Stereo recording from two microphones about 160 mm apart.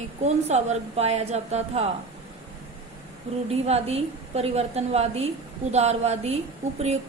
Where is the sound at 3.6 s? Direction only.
40° right (ahead or behind).